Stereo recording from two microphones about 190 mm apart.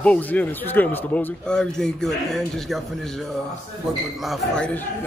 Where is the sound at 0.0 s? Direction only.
5° left (ahead or behind).